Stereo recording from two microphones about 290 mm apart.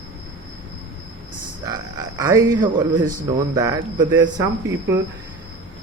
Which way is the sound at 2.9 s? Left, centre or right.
Right.